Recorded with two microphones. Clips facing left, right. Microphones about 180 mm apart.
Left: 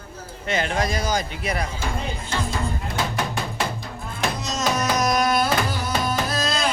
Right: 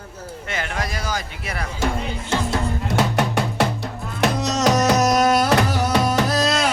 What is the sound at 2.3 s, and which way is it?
Music, 75° right (ahead or behind).